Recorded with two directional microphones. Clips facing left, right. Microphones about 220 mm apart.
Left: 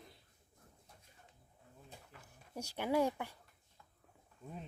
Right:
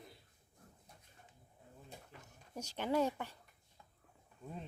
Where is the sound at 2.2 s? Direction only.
10° left (ahead or behind).